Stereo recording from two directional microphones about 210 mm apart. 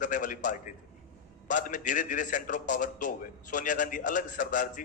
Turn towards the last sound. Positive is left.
turn(degrees=40)  # may be behind; listen again after turning